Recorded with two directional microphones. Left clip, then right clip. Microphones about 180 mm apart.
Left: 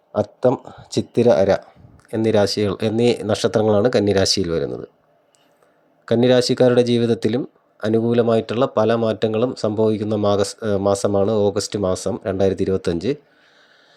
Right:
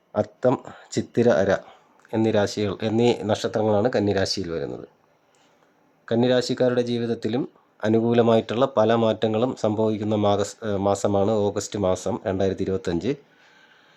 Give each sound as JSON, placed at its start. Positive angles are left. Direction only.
{"t": 0.1, "sound": "speech", "side_deg": 10}
{"t": 0.5, "sound": "speech", "side_deg": -10}
{"t": 0.9, "sound": "speech", "side_deg": 10}
{"t": 6.1, "sound": "speech", "side_deg": 20}